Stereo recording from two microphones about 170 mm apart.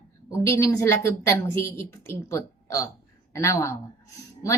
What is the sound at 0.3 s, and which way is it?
Speech, 15° left (ahead or behind).